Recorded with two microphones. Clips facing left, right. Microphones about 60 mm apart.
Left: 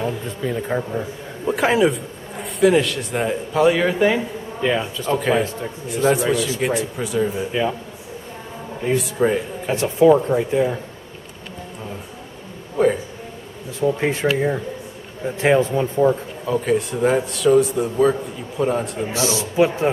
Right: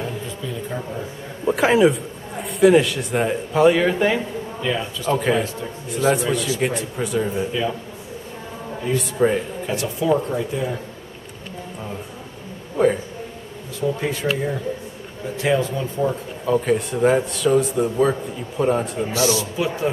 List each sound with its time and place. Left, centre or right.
0.4 s a man's voice: left
1.4 s speech: centre
4.6 s speech: left
5.1 s speech: centre
8.9 s speech: centre
9.7 s speech: left
12.7 s a man's voice: centre
13.7 s speech: left
16.4 s speech: centre
19.1 s speech: left